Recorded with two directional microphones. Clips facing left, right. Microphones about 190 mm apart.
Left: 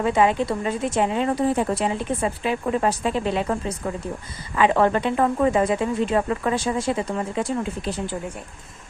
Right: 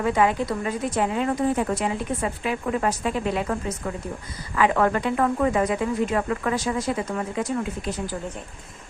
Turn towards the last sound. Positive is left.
turn(degrees=30)  # may be behind; listen again after turning